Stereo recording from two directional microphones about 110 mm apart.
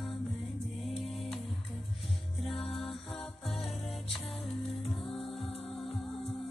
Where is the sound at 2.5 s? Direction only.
60° left (ahead or behind).